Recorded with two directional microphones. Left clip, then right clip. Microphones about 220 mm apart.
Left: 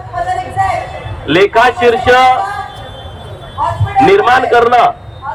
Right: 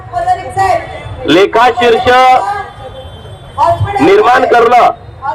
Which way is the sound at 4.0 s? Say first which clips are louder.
Right 1 dB; 25° right (ahead or behind).